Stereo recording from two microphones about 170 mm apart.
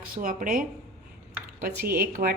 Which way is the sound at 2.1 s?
65° right (ahead or behind).